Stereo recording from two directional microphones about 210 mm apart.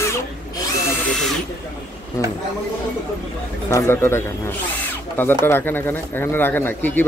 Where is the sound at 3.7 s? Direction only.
15° left (ahead or behind).